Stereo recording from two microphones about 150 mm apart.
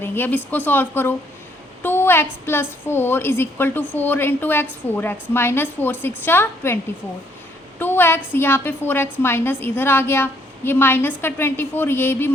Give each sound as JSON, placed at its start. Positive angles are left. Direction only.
{"t": 0.0, "sound": "a woman's voice", "side_deg": 15}
{"t": 7.8, "sound": "a woman's voice", "side_deg": 15}